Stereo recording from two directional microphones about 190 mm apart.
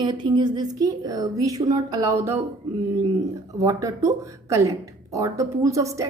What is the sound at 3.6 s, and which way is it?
A woman's voice, 20° right (ahead or behind).